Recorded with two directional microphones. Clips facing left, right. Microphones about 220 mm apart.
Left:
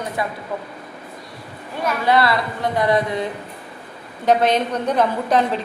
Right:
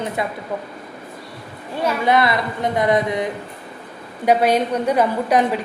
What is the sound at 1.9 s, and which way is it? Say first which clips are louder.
A woman's voice: even; 20° right (ahead or behind).